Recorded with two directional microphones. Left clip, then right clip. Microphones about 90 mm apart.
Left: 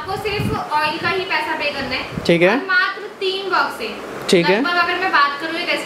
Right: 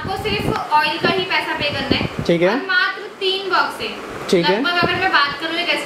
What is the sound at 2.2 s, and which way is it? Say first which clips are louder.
Speech: left 3 dB; 15° left (ahead or behind).